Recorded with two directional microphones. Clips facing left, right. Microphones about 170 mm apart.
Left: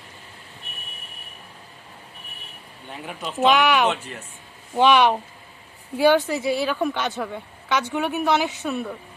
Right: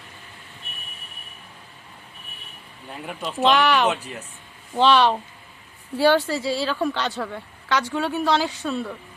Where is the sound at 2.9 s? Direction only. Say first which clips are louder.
Right 1 dB; centre (ahead or behind).